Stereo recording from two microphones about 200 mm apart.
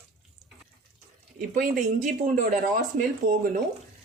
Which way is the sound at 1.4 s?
40° right (ahead or behind).